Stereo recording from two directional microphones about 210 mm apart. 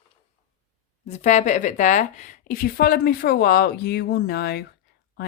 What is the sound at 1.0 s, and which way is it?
Speech, 35° left (ahead or behind).